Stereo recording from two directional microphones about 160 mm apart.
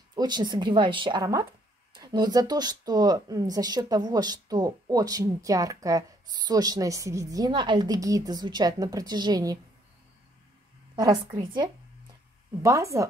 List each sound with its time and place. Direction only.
0.1 s speech: 25° right (ahead or behind)
11.3 s speech: 30° right (ahead or behind)